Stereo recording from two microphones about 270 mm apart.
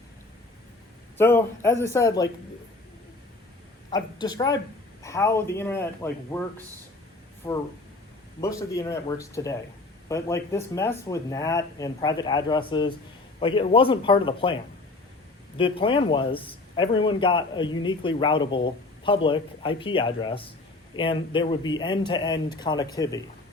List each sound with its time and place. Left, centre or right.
1.2 s speech: centre
3.8 s speech: centre
7.4 s speech: centre
15.5 s speech: centre